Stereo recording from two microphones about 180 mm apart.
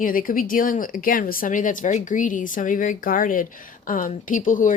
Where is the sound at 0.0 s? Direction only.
50° left (ahead or behind).